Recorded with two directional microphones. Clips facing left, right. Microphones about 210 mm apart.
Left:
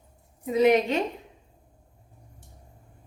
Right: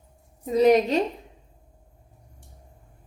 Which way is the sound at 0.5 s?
40° right (ahead or behind).